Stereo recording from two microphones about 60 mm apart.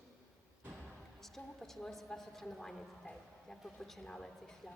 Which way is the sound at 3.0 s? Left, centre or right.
Left.